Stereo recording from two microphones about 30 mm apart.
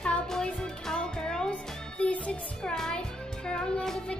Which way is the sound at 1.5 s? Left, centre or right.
Left.